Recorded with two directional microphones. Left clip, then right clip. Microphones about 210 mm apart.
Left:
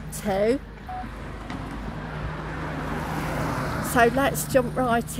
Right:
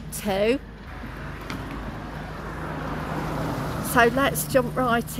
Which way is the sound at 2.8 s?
55° left (ahead or behind).